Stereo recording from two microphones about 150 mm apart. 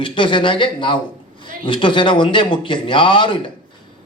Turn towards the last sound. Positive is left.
turn(degrees=35)  # may be behind; listen again after turning